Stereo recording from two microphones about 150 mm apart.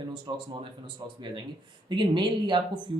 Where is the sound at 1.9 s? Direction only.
30° right (ahead or behind).